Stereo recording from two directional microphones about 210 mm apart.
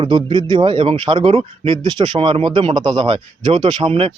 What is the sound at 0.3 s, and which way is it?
A man's voice, 20° right (ahead or behind).